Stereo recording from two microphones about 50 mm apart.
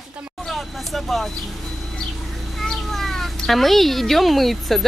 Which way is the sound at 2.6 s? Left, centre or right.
Centre.